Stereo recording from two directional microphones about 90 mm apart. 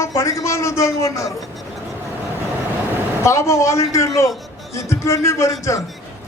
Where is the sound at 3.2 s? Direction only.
35° left (ahead or behind).